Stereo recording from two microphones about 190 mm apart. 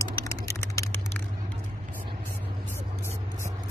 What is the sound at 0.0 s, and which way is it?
Typing, 15° left (ahead or behind).